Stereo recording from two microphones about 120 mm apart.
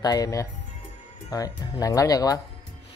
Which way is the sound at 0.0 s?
30° left (ahead or behind).